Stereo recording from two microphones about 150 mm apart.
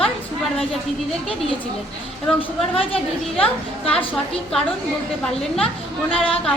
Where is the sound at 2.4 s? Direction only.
40° left (ahead or behind).